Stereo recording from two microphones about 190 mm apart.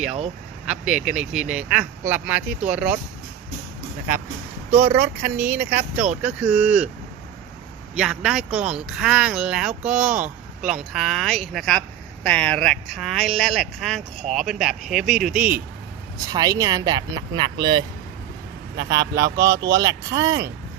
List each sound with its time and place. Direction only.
0.6 s speech: 5° right (ahead or behind)
4.8 s speech: 10° right (ahead or behind)
7.9 s speech: 5° right (ahead or behind)
16.1 s speech: 20° right (ahead or behind)